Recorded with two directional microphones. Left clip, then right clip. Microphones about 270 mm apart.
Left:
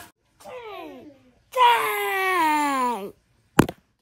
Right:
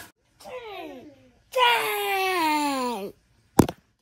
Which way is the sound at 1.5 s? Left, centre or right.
Centre.